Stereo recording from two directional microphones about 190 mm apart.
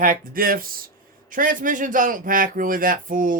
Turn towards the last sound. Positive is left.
turn(degrees=-45)  # may be behind; listen again after turning